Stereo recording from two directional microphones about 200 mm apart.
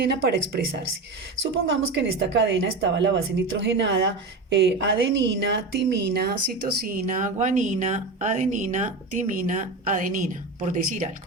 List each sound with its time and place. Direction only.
0.0 s a woman's voice: 55° right (ahead or behind)
1.7 s a woman's voice: 65° right (ahead or behind); by 11.1 s 40° right (ahead or behind)